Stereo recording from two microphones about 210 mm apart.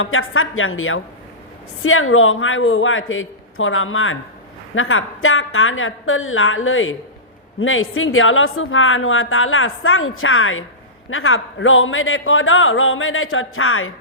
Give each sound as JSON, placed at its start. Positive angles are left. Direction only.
{"t": 0.0, "sound": "a woman's voice", "side_deg": 75}